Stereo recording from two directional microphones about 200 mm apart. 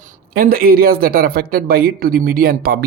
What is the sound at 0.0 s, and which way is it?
Speech, 45° right (ahead or behind).